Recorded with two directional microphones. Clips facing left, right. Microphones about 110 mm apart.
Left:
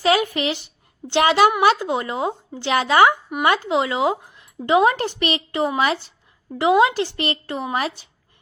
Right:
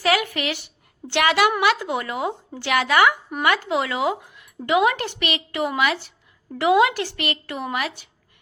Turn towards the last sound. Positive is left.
turn(degrees=30)  # may be behind; listen again after turning